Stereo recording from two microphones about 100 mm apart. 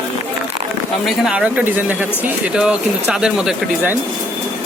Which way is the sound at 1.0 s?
5° right (ahead or behind).